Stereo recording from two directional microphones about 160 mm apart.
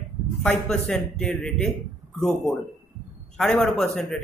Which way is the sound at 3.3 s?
5° left (ahead or behind).